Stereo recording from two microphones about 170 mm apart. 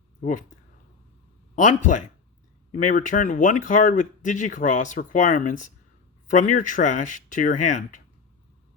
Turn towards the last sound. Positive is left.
turn(degrees=45)  # may be behind; listen again after turning